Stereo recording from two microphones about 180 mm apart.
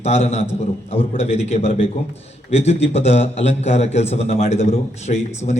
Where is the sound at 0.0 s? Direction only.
35° left (ahead or behind).